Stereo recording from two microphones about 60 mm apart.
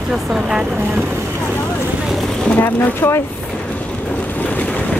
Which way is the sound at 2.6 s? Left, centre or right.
Left.